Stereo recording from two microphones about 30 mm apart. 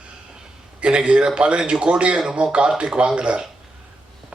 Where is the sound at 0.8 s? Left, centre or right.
Right.